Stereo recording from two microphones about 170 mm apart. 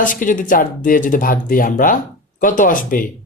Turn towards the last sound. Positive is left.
turn(degrees=55)  # may be behind; listen again after turning